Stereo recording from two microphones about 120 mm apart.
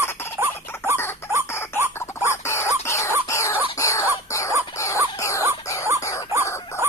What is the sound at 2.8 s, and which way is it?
Cough, 25° left (ahead or behind).